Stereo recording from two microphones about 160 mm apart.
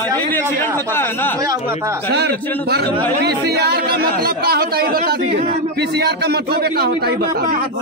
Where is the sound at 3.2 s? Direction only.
90° right; by 5.5 s 70° right (ahead or behind).